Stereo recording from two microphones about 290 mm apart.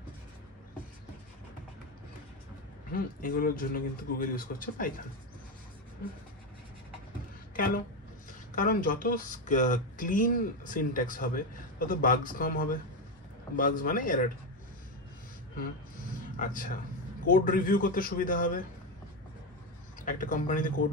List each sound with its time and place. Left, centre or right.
2.9 s speech: left
7.5 s a sound: left
8.5 s speech: left
16.3 s speech: left
20.1 s speech: left